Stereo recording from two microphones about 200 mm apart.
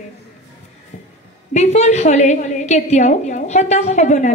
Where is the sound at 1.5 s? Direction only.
35° left (ahead or behind).